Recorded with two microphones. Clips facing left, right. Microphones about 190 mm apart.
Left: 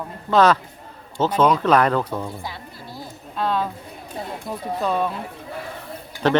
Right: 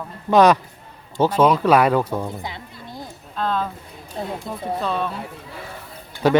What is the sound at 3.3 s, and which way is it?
Speech, 10° left (ahead or behind).